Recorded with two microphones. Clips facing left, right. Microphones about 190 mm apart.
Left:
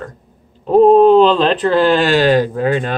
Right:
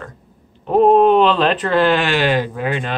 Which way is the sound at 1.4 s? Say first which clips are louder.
Left 3 dB; centre (ahead or behind).